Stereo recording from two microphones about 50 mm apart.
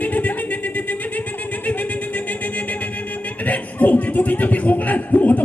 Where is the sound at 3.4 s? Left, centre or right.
Left.